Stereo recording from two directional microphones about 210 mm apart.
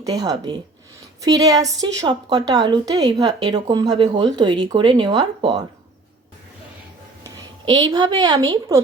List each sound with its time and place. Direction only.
0.0 s a woman's voice: 15° right (ahead or behind)
7.3 s speech: 20° right (ahead or behind)